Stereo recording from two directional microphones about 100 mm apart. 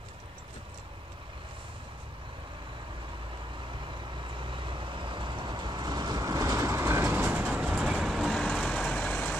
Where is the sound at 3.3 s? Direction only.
55° right (ahead or behind); by 7.8 s 20° right (ahead or behind).